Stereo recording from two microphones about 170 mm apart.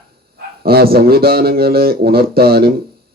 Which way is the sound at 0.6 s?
65° right (ahead or behind).